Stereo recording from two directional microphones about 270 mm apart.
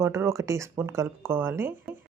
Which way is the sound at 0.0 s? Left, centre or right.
Centre.